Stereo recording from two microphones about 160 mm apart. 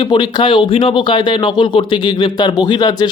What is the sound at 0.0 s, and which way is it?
Speech, 30° left (ahead or behind).